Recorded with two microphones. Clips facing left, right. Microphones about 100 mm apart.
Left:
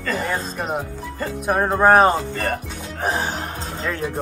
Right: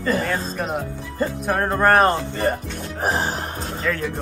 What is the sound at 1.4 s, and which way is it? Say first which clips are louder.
Music: left 3 dB; 10° left (ahead or behind).